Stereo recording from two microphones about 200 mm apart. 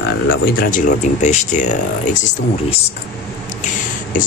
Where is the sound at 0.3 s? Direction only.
45° left (ahead or behind).